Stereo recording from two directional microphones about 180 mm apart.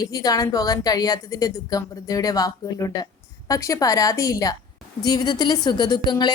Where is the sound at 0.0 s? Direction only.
20° left (ahead or behind).